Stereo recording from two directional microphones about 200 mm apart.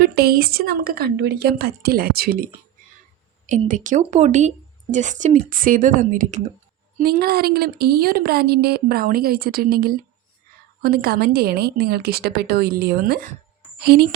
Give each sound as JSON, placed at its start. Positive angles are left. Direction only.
{"t": 0.0, "sound": "speech", "side_deg": -50}
{"t": 3.4, "sound": "speech", "side_deg": -40}
{"t": 7.0, "sound": "a woman's voice", "side_deg": -50}